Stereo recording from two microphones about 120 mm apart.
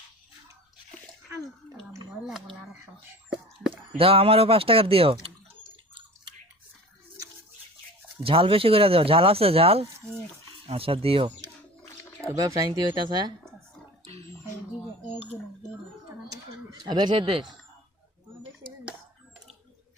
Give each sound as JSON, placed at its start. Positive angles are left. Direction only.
{"t": 1.9, "sound": "a sound", "side_deg": -30}
{"t": 3.2, "sound": "whispering", "side_deg": -5}
{"t": 3.9, "sound": "speech", "side_deg": -50}
{"t": 8.2, "sound": "speech", "side_deg": -50}
{"t": 12.4, "sound": "speech", "side_deg": -30}
{"t": 16.3, "sound": "a sound", "side_deg": -35}